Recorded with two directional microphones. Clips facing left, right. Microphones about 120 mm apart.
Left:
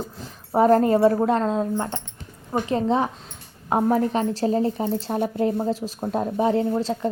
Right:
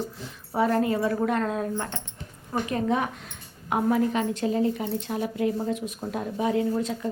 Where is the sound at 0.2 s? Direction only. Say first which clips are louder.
Left 7 dB; 40° left (ahead or behind).